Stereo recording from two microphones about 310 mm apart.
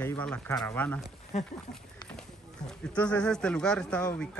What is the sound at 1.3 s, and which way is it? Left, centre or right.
Speech, left.